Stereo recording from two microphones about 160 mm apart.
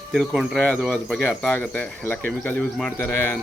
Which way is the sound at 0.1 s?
Centre (ahead or behind).